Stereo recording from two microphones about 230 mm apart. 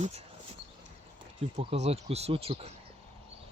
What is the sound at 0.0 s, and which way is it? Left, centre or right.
Speech, right.